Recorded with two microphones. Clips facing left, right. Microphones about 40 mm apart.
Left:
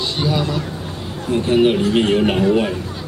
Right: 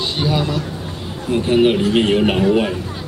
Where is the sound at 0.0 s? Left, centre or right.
Centre.